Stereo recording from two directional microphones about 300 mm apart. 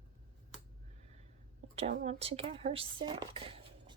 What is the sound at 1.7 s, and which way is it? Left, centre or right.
Speech, right.